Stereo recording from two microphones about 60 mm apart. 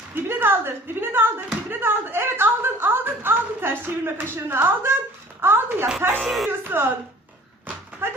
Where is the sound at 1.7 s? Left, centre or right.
Right.